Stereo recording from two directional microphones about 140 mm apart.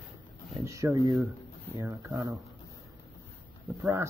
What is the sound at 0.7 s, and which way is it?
Speech, 20° right (ahead or behind).